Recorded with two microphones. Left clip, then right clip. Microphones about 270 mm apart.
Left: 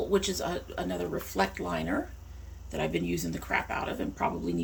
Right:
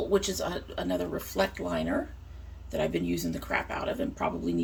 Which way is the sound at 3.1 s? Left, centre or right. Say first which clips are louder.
Even; centre.